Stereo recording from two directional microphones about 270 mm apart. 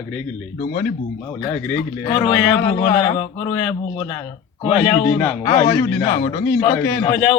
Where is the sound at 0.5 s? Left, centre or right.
Left.